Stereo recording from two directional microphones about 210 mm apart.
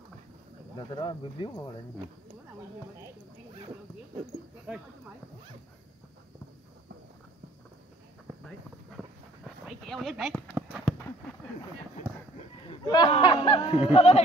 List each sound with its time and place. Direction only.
0.9 s speech: 20° left (ahead or behind)
9.7 s a sound: centre (ahead or behind)
12.6 s speech: 20° left (ahead or behind)